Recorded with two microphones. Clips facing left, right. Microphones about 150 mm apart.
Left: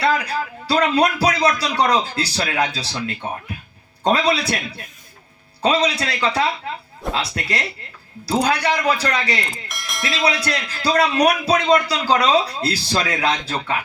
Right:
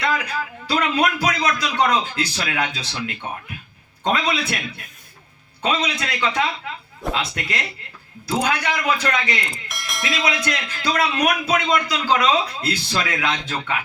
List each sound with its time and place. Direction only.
0.0 s speech: 35° left (ahead or behind)
5.6 s speech: 35° left (ahead or behind)
9.5 s bell: centre (ahead or behind)
10.4 s speech: 35° left (ahead or behind)